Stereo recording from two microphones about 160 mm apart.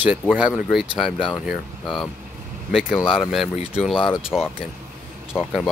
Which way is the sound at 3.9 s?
35° left (ahead or behind).